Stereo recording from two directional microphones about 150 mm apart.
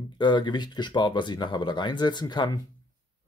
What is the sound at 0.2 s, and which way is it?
Speech, 30° left (ahead or behind).